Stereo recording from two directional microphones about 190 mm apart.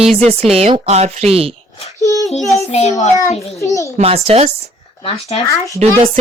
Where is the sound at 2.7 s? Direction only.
35° left (ahead or behind).